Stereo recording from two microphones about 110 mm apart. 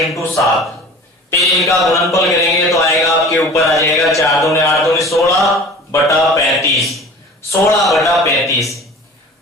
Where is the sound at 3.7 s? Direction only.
30° left (ahead or behind).